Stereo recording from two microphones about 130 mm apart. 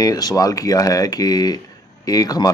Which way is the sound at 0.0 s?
30° left (ahead or behind).